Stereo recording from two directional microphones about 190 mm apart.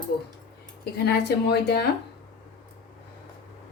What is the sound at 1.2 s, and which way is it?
Speech, 55° left (ahead or behind).